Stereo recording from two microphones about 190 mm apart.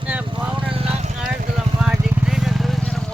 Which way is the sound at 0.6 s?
30° right (ahead or behind).